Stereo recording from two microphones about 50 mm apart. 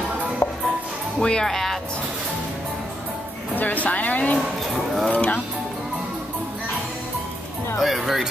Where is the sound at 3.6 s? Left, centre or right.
Left.